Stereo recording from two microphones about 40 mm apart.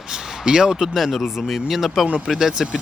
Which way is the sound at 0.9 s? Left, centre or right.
Centre.